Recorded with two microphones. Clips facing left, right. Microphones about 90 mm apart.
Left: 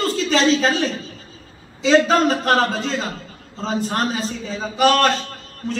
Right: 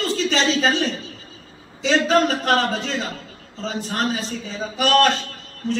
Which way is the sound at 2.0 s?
40° left (ahead or behind).